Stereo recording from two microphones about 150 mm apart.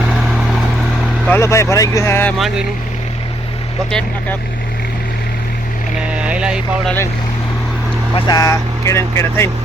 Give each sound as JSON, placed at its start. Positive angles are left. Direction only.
{"t": 1.3, "sound": "speech", "side_deg": 20}
{"t": 6.1, "sound": "vehicle", "side_deg": -5}
{"t": 6.8, "sound": "speech", "side_deg": 15}
{"t": 8.1, "sound": "speech", "side_deg": 25}